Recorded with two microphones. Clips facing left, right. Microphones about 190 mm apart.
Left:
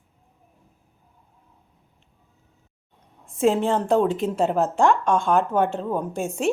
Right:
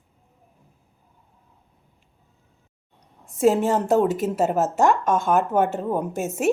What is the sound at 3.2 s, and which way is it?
A woman's voice, centre (ahead or behind).